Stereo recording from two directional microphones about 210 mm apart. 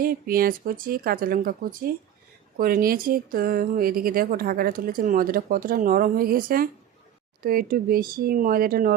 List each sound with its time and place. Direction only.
0.0 s a woman's voice: 45° right (ahead or behind)